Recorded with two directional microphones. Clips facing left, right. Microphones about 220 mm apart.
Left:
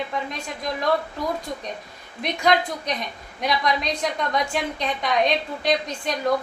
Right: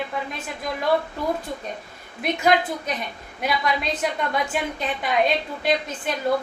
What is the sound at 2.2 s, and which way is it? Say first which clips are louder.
A woman's voice: right 1 dB; 5° right (ahead or behind).